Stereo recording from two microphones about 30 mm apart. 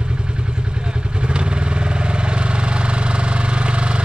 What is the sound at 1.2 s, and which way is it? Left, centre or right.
Vehicle, right.